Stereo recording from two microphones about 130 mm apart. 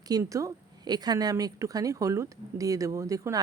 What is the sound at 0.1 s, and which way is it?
A woman's voice, 25° right (ahead or behind).